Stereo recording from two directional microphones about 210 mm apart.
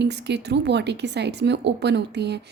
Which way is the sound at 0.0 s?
55° right (ahead or behind).